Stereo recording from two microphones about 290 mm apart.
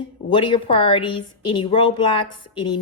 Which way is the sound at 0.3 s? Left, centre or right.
Centre.